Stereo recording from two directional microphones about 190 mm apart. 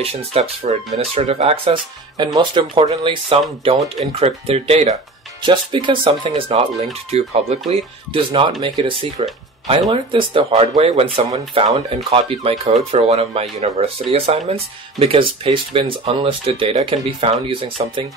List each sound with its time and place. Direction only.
0.0 s speech: 30° right (ahead or behind)